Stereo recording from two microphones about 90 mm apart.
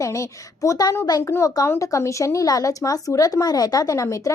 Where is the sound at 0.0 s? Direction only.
35° left (ahead or behind).